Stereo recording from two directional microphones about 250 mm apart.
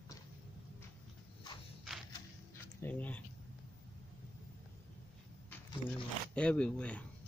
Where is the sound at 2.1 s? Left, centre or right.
Centre.